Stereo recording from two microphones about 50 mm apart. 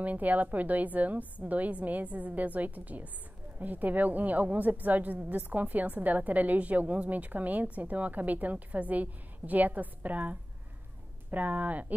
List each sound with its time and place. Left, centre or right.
0.0 s a woman's voice: right